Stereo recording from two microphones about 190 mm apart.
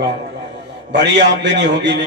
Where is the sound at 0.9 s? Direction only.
65° right (ahead or behind).